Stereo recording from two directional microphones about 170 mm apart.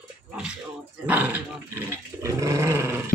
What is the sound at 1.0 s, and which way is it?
Dog, 10° right (ahead or behind).